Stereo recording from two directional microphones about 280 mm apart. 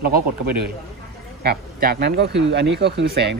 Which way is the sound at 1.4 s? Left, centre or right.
Right.